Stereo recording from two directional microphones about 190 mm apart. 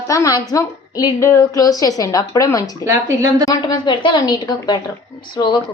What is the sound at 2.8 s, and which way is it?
Speech, 15° right (ahead or behind).